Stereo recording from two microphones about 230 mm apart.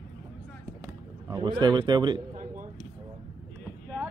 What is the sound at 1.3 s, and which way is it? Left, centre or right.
Speech, centre.